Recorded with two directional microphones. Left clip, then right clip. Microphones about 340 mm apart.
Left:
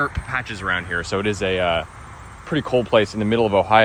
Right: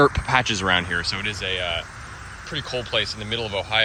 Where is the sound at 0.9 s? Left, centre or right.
Centre.